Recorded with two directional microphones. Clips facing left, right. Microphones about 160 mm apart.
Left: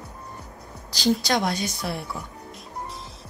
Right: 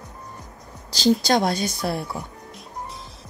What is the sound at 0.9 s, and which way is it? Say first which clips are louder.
Speech: right 4 dB; 25° right (ahead or behind).